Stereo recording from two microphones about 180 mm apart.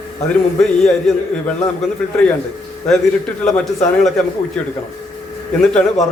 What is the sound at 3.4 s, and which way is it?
Speech, centre (ahead or behind).